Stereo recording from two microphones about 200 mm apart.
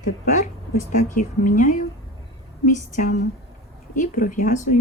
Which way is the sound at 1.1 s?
40° left (ahead or behind).